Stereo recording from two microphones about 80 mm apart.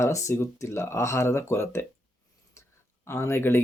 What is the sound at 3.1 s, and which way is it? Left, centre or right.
Speech, left.